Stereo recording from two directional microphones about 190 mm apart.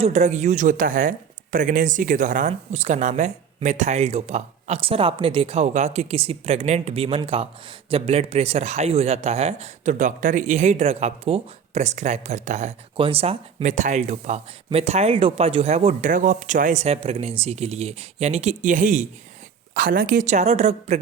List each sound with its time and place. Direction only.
0.0 s speech: 35° right (ahead or behind)